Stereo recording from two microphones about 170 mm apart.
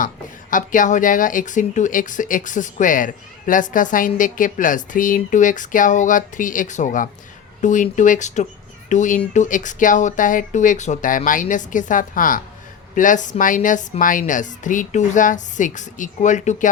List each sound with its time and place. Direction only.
0.5 s speech: 50° left (ahead or behind)